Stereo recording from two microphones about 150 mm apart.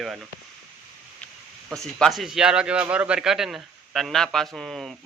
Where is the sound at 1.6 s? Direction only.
5° left (ahead or behind).